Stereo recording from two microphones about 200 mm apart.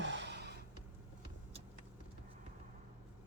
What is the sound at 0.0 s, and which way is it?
Gasp, 65° right (ahead or behind).